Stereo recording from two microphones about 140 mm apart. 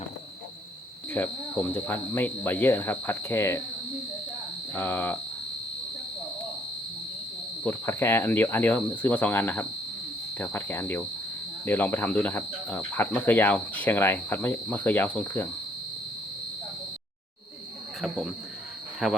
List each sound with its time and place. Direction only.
1.1 s speech: 15° left (ahead or behind)
4.7 s speech: 15° left (ahead or behind)
7.6 s speech: 15° left (ahead or behind)
18.0 s speech: centre (ahead or behind)